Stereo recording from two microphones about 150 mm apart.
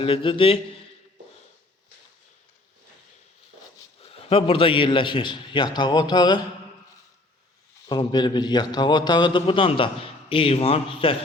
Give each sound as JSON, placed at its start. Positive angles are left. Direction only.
{"t": 0.0, "sound": "a man's voice", "side_deg": 35}
{"t": 4.1, "sound": "a man's voice", "side_deg": 40}
{"t": 7.9, "sound": "a man's voice", "side_deg": 30}